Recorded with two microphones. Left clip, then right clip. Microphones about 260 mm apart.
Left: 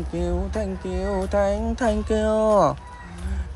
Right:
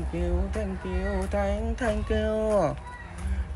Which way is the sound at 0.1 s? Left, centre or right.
Centre.